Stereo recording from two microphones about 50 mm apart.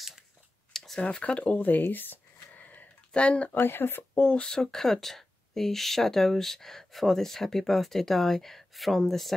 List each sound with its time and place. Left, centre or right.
0.7 s a sound: centre
1.0 s speech: left
3.5 s speech: left
4.1 s speech: left
4.4 s speech: centre